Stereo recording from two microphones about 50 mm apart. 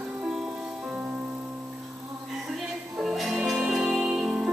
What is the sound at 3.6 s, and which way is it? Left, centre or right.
Music, centre.